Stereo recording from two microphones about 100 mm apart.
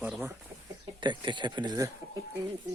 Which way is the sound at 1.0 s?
50° right (ahead or behind).